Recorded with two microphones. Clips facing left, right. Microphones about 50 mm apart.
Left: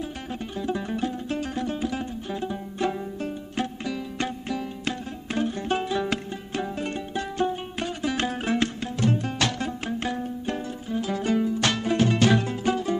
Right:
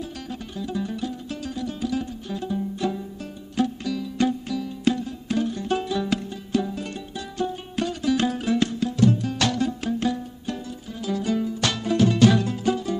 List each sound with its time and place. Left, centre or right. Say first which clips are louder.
0.3 s music: left 3 dB; left